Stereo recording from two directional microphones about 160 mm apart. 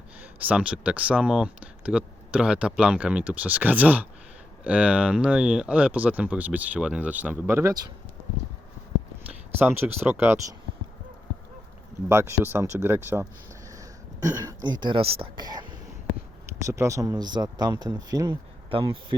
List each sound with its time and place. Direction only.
0.2 s speech: 10° right (ahead or behind)
9.3 s speech: 10° right (ahead or behind)
12.0 s speech: 15° right (ahead or behind)
18.7 s speech: 35° right (ahead or behind)